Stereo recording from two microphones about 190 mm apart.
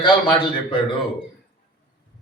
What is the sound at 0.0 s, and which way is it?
Speech, 25° left (ahead or behind).